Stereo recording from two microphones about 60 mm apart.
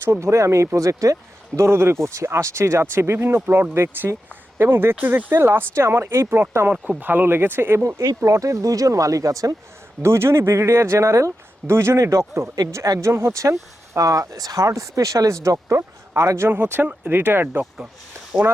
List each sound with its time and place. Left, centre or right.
0.0 s speech: right
4.1 s a sound: right
4.9 s speech: right
7.0 s speech: right
7.9 s speech: right
10.0 s speech: right
11.9 s a man's voice: right
16.5 s speech: right
18.3 s speech: centre